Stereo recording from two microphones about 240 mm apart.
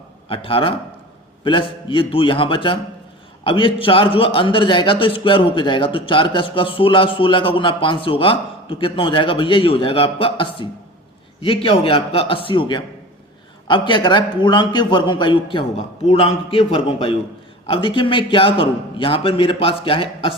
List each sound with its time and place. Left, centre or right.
0.3 s a man's voice: left